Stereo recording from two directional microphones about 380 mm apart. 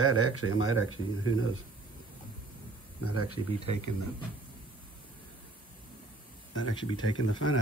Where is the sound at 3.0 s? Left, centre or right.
Left.